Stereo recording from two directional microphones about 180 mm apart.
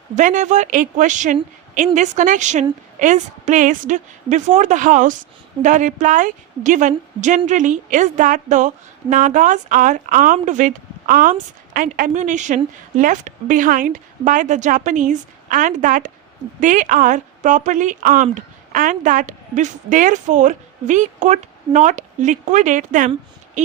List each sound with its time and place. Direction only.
0.2 s a woman's voice: 45° right (ahead or behind)